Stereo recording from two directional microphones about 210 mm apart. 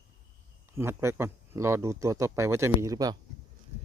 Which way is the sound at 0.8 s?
10° right (ahead or behind).